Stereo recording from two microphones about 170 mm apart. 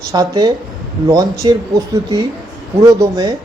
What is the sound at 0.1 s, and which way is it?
Speech, 25° right (ahead or behind).